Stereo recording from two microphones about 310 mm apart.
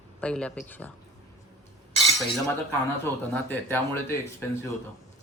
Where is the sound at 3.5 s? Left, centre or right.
Centre.